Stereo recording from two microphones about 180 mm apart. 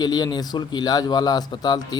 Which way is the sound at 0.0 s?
20° left (ahead or behind).